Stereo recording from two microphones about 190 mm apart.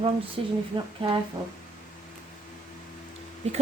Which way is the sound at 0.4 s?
30° right (ahead or behind).